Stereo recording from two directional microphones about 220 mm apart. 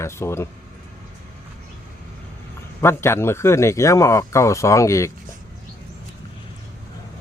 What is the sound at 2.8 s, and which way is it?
Speech, 10° left (ahead or behind).